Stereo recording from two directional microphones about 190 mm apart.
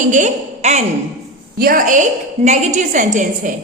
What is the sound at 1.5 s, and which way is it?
A woman's voice, 50° right (ahead or behind).